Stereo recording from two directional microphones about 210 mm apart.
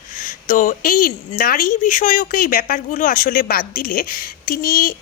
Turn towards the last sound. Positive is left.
turn(degrees=45)  # may be behind; listen again after turning